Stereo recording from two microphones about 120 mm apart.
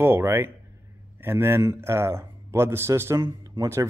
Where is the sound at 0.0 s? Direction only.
20° right (ahead or behind).